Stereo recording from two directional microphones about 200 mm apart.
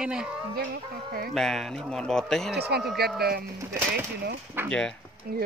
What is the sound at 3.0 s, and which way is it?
Speech, 50° right (ahead or behind).